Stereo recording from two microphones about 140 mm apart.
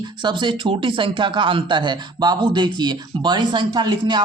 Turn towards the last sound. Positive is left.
turn(degrees=-30)  # may be behind; listen again after turning